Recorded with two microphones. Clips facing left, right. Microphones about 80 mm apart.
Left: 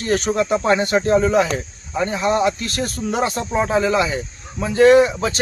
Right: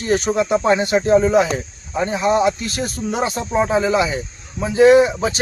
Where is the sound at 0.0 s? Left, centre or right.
Centre.